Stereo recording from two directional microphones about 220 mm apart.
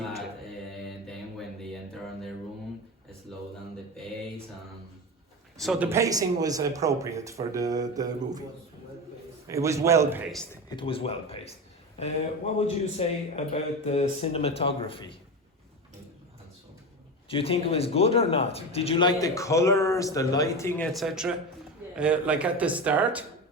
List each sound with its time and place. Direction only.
0.9 s mantra: centre (ahead or behind)
3.3 s a sound: centre (ahead or behind)
5.5 s speech: centre (ahead or behind)
5.9 s speech: 15° right (ahead or behind)
9.5 s speech: 15° right (ahead or behind)
10.8 s a man's voice: 25° left (ahead or behind)
12.5 s a man's voice: 30° left (ahead or behind)
17.2 s speech: 25° left (ahead or behind); by 23.2 s 5° right (ahead or behind)